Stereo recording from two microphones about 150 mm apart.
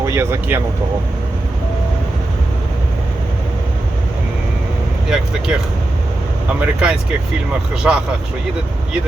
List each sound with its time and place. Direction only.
0.0 s speech: 20° right (ahead or behind)
5.0 s speech: 5° right (ahead or behind)
6.6 s speech: 5° right (ahead or behind)